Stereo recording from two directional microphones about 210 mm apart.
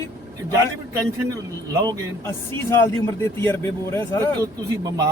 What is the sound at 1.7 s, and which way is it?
Speech, 15° right (ahead or behind).